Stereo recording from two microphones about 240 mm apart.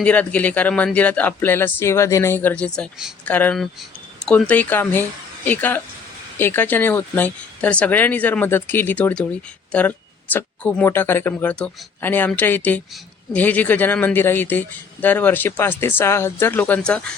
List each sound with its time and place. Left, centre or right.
0.0 s speech: centre